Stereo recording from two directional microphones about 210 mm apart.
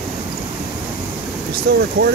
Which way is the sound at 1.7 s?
50° right (ahead or behind).